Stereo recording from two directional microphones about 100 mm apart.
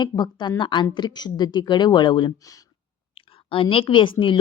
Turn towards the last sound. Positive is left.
turn(degrees=55)  # may be behind; listen again after turning